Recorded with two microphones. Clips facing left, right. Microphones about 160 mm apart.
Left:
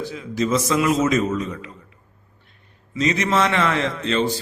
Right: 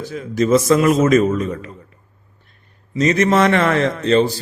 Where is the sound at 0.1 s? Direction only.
50° right (ahead or behind).